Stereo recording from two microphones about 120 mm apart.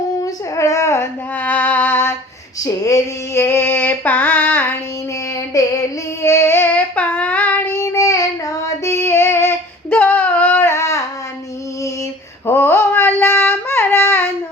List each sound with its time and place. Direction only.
0.2 s music: 25° left (ahead or behind)
2.6 s female singing: 30° left (ahead or behind)
5.5 s a sound: 30° left (ahead or behind)
6.2 s child singing: 20° left (ahead or behind)
12.5 s female singing: 20° left (ahead or behind)